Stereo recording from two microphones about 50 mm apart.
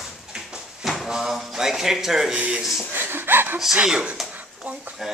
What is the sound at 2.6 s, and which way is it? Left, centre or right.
Speech, centre.